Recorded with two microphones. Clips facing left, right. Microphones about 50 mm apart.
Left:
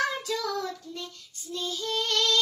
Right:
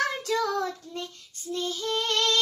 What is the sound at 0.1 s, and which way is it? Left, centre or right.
Child singing, right.